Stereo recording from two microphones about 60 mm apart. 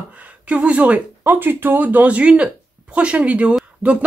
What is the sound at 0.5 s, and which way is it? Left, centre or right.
Speech, right.